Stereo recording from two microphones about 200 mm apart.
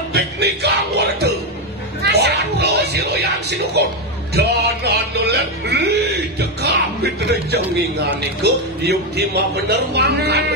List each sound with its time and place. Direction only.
0.1 s music: 55° right (ahead or behind)
4.3 s speech: 55° right (ahead or behind)